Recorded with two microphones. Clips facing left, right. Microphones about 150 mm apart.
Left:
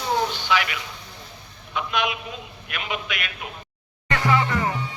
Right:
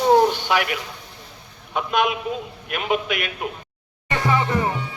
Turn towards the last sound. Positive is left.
turn(degrees=-25)  # may be behind; listen again after turning